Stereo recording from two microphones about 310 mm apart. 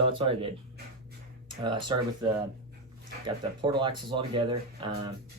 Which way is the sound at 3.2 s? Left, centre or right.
Centre.